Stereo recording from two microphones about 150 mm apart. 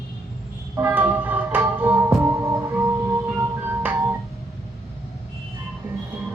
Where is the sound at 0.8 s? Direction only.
10° right (ahead or behind).